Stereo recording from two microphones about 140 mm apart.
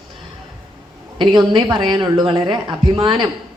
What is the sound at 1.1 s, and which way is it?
Speech, 35° right (ahead or behind).